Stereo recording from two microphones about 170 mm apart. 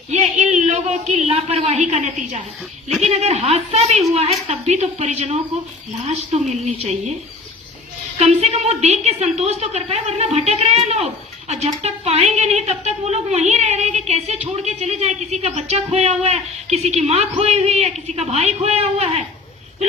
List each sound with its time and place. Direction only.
0.1 s a man's voice: 45° right (ahead or behind)
8.2 s speech: 40° right (ahead or behind)